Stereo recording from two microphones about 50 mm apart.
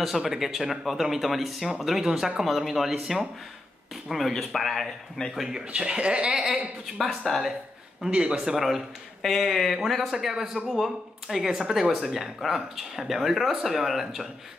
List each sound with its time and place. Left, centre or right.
0.0 s speech: centre
2.9 s speech: centre
3.9 s speech: centre
5.7 s speech: centre
6.3 s speech: centre
7.1 s speech: centre
8.1 s speech: right
8.5 s speech: centre
10.2 s speech: centre